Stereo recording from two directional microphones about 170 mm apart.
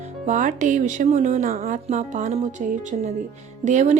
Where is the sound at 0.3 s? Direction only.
50° right (ahead or behind).